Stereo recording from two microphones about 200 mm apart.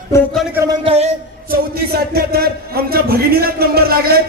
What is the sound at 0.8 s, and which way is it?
Speech, 30° right (ahead or behind).